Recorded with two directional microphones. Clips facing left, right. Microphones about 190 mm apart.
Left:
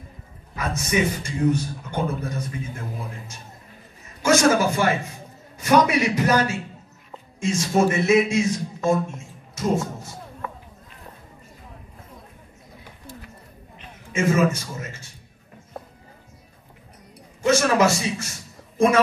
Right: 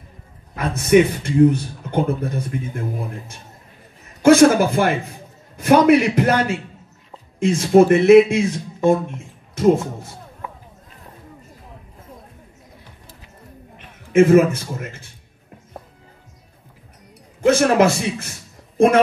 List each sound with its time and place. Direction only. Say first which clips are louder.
0.6 s a man's voice: right 9 dB; 60° right (ahead or behind)
4.2 s a man's voice: right 7 dB; 55° right (ahead or behind)
13.7 s a man's voice: right 12 dB; 55° right (ahead or behind)
17.5 s a man's voice: right 4 dB; 55° right (ahead or behind)